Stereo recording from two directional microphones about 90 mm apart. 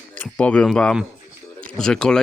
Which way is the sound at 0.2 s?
15° left (ahead or behind).